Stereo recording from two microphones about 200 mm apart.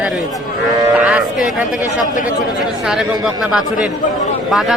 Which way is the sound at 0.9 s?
5° right (ahead or behind).